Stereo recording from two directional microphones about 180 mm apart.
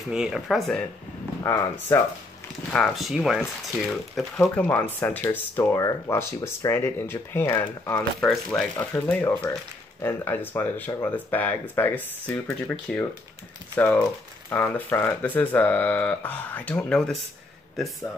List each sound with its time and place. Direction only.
0.1 s speech: 5° right (ahead or behind)
1.4 s speech: 15° left (ahead or behind)
2.7 s speech: centre (ahead or behind)